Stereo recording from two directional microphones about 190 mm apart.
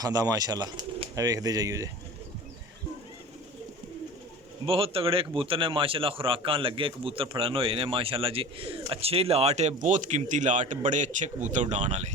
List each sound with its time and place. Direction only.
0.0 s speech: 20° right (ahead or behind)
4.6 s speech: 30° right (ahead or behind)